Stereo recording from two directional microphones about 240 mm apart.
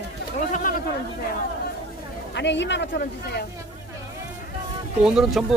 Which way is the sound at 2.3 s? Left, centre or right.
Left.